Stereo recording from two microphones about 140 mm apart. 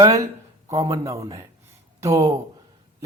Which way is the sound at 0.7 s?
25° right (ahead or behind).